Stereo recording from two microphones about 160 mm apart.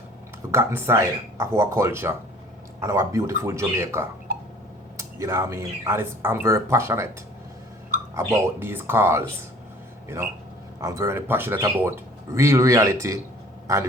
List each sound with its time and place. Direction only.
0.5 s speech: 15° right (ahead or behind)
8.1 s speech: 15° right (ahead or behind)
10.8 s speech: 15° right (ahead or behind)